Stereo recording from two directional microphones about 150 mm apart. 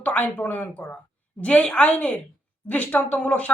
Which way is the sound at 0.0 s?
10° left (ahead or behind).